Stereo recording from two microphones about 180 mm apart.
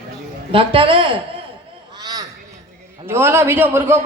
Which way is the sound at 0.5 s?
30° right (ahead or behind).